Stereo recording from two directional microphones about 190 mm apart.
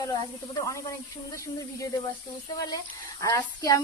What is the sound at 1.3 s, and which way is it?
Speech, 15° left (ahead or behind).